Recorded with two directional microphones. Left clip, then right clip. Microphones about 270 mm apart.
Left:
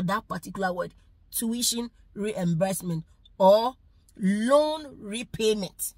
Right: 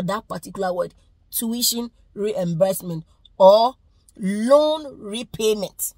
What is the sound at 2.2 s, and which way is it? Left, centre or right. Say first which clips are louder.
Speech: right 8 dB; centre.